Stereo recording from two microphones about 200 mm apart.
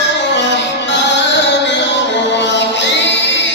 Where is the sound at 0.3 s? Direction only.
60° left (ahead or behind).